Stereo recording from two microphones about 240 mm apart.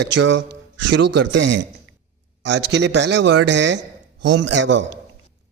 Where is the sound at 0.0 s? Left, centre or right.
Right.